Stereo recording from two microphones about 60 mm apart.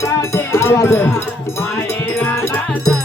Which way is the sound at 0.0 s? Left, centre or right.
Left.